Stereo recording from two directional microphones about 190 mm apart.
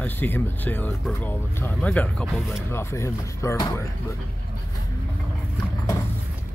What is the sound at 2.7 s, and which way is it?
Speech, 15° left (ahead or behind).